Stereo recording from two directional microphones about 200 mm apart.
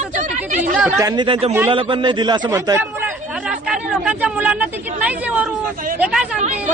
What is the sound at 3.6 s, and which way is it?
Speech, 5° right (ahead or behind).